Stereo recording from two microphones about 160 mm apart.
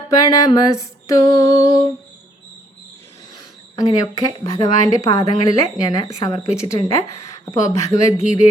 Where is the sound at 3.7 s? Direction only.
25° left (ahead or behind).